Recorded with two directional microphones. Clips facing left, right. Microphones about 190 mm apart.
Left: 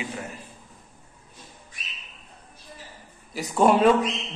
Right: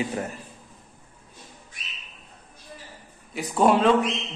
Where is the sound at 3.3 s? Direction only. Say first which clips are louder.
Even; centre (ahead or behind).